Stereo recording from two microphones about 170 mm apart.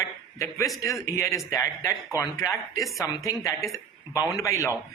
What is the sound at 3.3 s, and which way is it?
A man's voice, 20° left (ahead or behind).